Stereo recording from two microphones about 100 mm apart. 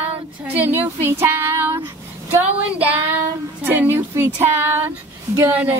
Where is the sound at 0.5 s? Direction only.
20° right (ahead or behind).